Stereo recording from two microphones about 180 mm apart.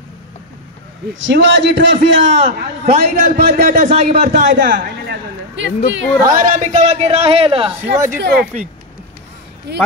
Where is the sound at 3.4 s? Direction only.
60° right (ahead or behind).